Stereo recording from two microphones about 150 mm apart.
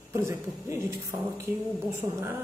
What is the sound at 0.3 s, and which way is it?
A woman's voice, 20° right (ahead or behind).